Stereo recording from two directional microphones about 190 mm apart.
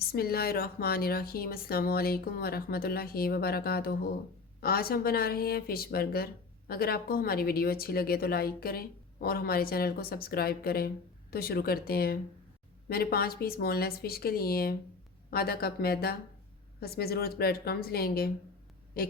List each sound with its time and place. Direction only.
0.1 s a woman's voice: 55° left (ahead or behind)